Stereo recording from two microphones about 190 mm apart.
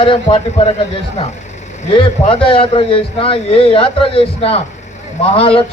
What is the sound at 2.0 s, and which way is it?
A man's voice, 30° left (ahead or behind).